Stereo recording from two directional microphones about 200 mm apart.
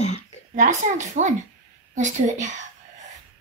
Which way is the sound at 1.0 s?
35° right (ahead or behind).